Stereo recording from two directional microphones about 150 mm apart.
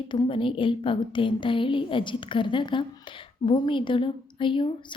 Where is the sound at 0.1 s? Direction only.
35° left (ahead or behind).